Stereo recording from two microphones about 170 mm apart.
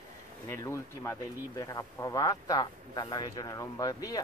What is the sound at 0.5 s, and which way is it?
Speech, 15° left (ahead or behind).